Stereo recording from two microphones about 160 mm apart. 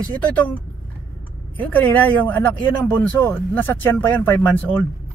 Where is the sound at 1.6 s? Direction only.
10° left (ahead or behind).